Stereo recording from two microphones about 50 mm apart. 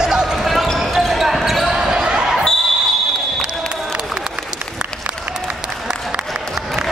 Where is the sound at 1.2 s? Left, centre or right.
Centre.